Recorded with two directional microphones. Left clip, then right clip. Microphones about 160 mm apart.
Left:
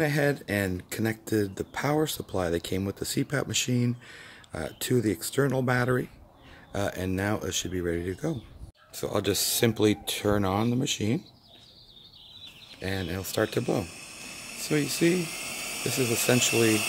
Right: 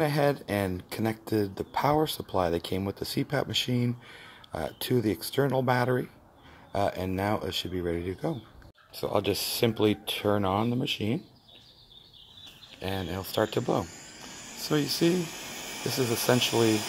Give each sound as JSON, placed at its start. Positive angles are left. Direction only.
{"t": 0.0, "sound": "speech", "side_deg": 15}
{"t": 12.8, "sound": "speech", "side_deg": 20}
{"t": 14.5, "sound": "speech", "side_deg": 10}